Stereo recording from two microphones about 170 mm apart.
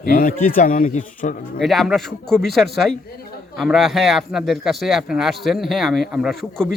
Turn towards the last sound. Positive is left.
turn(degrees=5)  # may be behind; listen again after turning